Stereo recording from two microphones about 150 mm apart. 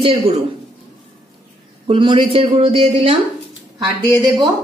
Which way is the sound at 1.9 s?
35° right (ahead or behind).